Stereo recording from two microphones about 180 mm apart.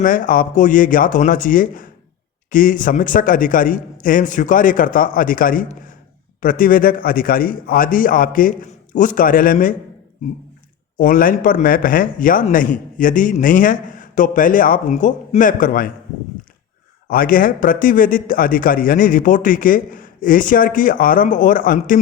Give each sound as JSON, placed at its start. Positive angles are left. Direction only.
{"t": 0.0, "sound": "a man's voice", "side_deg": 50}
{"t": 10.9, "sound": "a man's voice", "side_deg": 50}
{"t": 17.1, "sound": "a man's voice", "side_deg": 50}